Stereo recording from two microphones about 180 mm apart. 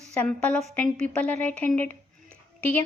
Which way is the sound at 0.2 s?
5° left (ahead or behind).